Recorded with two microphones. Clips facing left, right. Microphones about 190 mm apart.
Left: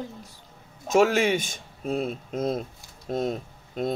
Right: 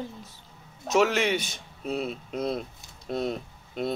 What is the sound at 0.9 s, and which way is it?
Speech, 50° left (ahead or behind).